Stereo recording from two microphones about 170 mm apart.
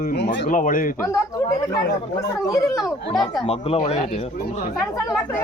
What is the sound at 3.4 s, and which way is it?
Speech, 35° left (ahead or behind).